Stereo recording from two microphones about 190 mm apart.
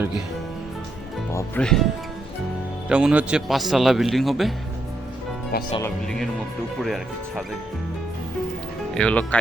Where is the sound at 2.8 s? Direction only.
5° right (ahead or behind).